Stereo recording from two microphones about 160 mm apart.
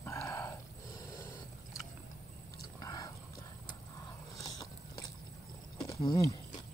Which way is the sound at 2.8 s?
25° left (ahead or behind).